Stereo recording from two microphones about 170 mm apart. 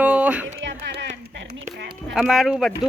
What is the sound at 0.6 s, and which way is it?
Music, 90° right.